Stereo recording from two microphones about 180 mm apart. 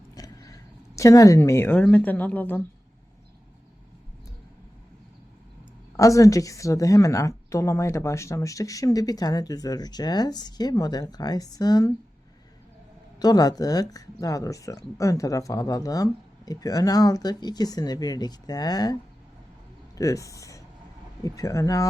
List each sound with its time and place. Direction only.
0.1 s a sound: 20° left (ahead or behind)
0.9 s a woman's voice: 20° left (ahead or behind)
6.0 s a woman's voice: 20° left (ahead or behind)
13.1 s a woman's voice: 20° left (ahead or behind)
20.0 s a woman's voice: 20° left (ahead or behind)